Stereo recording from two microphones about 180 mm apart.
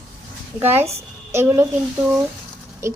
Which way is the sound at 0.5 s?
15° right (ahead or behind).